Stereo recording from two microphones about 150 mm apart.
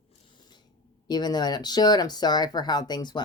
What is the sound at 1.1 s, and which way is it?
Speech, 30° left (ahead or behind).